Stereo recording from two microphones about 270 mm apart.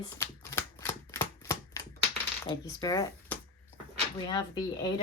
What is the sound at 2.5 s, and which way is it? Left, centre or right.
Speech, centre.